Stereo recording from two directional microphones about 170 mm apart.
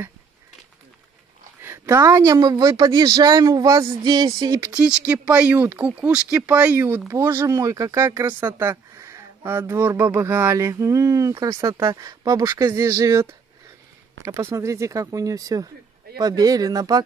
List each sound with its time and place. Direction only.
1.6 s speech: 15° right (ahead or behind)
4.7 s speech: 5° right (ahead or behind); by 17.0 s 20° right (ahead or behind)